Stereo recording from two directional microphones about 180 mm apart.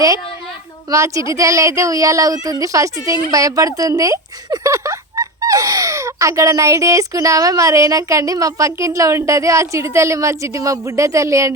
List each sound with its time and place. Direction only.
0.9 s speech: 15° right (ahead or behind)